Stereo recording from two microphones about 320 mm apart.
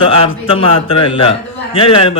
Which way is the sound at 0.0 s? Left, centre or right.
Centre.